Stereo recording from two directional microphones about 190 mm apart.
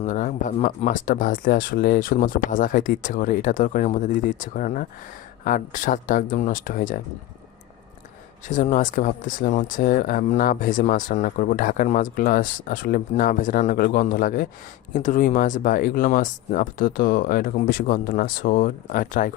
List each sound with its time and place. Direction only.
0.0 s speech: 40° left (ahead or behind)
8.4 s speech: 40° left (ahead or behind)